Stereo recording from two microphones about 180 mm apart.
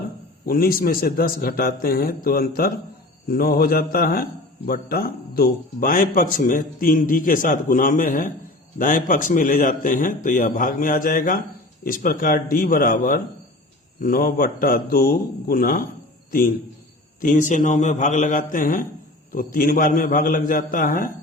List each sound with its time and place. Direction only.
0.4 s a man's voice: 55° left (ahead or behind)
17.2 s speech: 45° left (ahead or behind)